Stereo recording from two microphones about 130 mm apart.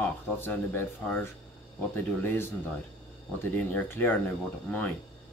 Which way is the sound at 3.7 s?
15° left (ahead or behind).